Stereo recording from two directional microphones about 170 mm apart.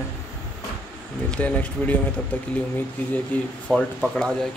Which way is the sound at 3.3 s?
10° left (ahead or behind).